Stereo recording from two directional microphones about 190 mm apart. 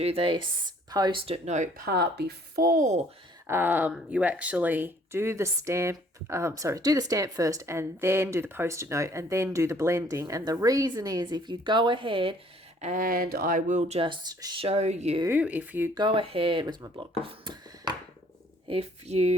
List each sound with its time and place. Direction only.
0.0 s speech: 30° right (ahead or behind)
3.4 s speech: 10° right (ahead or behind); by 12.4 s 30° right (ahead or behind)
12.8 s speech: 45° right (ahead or behind); by 14.7 s 25° right (ahead or behind)
14.7 s speech: 35° right (ahead or behind)
15.2 s speech: 10° right (ahead or behind)
16.0 s speech: 25° right (ahead or behind)